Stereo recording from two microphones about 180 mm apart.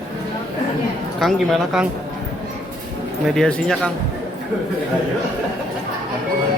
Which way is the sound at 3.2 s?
Centre (ahead or behind).